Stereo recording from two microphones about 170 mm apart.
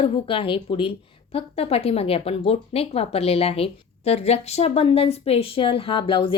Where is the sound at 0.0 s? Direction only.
30° left (ahead or behind).